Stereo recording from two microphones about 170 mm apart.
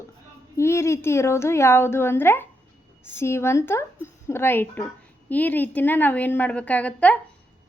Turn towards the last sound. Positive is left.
turn(degrees=10)  # may be behind; listen again after turning